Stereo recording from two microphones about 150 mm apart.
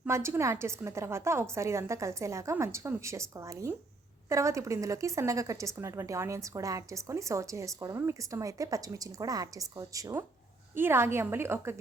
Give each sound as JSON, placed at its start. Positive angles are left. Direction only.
{"t": 0.1, "sound": "a woman's voice", "side_deg": -20}